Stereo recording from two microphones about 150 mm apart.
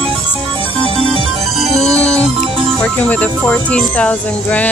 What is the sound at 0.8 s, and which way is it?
Music, 40° right (ahead or behind).